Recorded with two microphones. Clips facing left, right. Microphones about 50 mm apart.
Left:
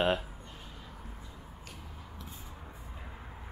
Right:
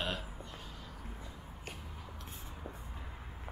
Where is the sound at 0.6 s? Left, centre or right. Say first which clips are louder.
Left 1 dB; centre.